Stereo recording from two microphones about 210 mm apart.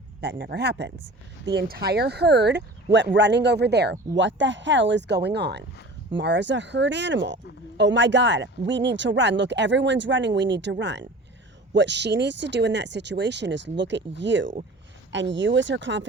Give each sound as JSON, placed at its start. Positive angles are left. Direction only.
{"t": 0.2, "sound": "speech", "side_deg": -55}